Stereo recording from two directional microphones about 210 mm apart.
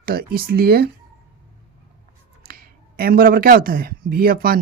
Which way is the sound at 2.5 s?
45° right (ahead or behind).